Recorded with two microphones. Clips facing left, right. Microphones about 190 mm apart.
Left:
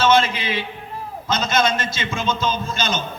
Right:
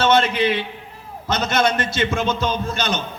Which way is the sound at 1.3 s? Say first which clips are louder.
Right 1 dB; 65° right (ahead or behind).